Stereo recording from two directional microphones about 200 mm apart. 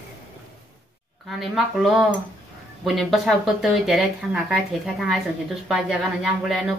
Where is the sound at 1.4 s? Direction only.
Centre (ahead or behind).